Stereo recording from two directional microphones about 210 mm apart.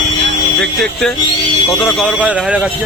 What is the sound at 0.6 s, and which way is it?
Speech, 5° left (ahead or behind).